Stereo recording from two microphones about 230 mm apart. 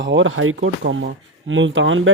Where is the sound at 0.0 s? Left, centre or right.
Right.